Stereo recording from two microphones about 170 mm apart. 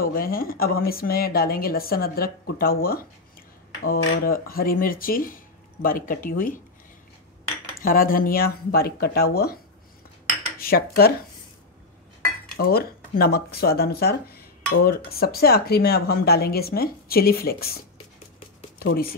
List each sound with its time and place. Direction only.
0.0 s speech: 60° left (ahead or behind)
3.8 s speech: 75° left (ahead or behind); by 6.6 s 55° left (ahead or behind)
7.8 s speech: 55° left (ahead or behind)
10.6 s speech: 65° left (ahead or behind)
12.4 s speech: 65° left (ahead or behind)
18.8 s speech: 65° left (ahead or behind)